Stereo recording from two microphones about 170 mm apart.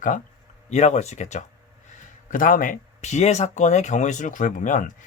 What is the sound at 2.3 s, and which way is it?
Speech, 55° left (ahead or behind).